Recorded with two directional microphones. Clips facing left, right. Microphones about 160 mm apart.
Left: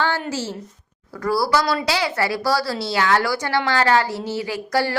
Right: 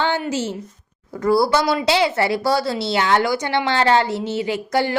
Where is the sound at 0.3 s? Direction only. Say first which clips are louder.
Right 3 dB; 20° right (ahead or behind).